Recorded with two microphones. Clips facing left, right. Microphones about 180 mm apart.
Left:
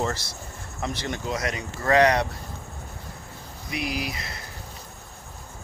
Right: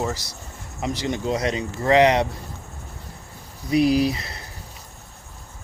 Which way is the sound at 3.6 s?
35° right (ahead or behind).